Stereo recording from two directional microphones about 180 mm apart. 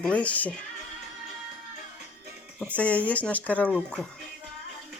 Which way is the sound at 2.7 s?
5° left (ahead or behind).